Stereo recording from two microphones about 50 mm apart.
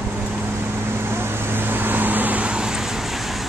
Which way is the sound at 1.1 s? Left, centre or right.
Right.